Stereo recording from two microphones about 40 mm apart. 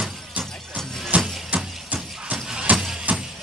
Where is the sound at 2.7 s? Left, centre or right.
Right.